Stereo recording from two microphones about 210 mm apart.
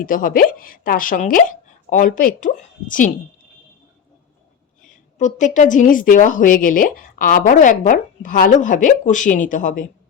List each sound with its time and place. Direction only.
0.0 s a woman's voice: 40° left (ahead or behind)
4.9 s a woman's voice: 35° left (ahead or behind)